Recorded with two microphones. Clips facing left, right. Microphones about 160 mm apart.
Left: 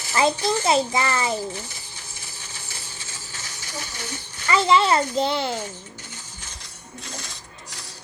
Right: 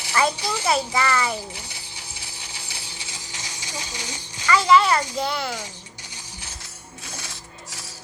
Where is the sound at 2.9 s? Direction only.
15° right (ahead or behind).